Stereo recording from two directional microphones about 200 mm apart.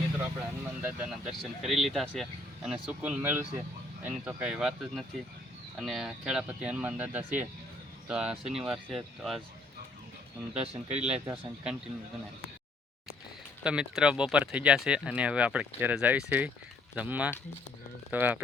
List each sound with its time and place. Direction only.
0.2 s speech: 10° right (ahead or behind)
10.6 s speech: 35° right (ahead or behind)
11.0 s speech: 5° right (ahead or behind)
13.7 s speech: 5° right (ahead or behind)